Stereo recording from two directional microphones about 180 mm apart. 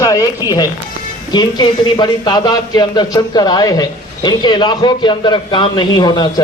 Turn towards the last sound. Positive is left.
turn(degrees=25)  # may be behind; listen again after turning